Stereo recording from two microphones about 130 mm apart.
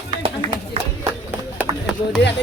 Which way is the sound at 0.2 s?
45° right (ahead or behind).